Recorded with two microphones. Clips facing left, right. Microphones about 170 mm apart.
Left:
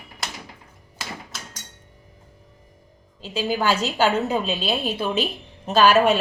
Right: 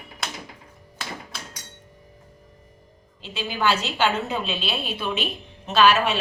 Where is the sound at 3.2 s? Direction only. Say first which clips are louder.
Left 4 dB; 40° left (ahead or behind).